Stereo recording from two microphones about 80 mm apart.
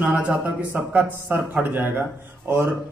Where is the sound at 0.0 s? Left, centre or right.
Centre.